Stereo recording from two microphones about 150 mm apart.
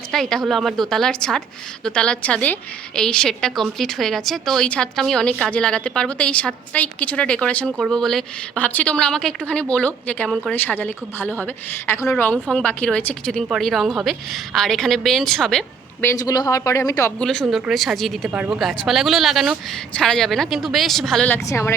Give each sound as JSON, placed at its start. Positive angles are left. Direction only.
{"t": 0.1, "sound": "a woman's voice", "side_deg": 0}
{"t": 10.5, "sound": "a woman's voice", "side_deg": 15}
{"t": 16.0, "sound": "speech", "side_deg": 20}
{"t": 17.2, "sound": "speech", "side_deg": 5}
{"t": 18.3, "sound": "speech", "side_deg": -10}
{"t": 21.3, "sound": "a woman's voice", "side_deg": 20}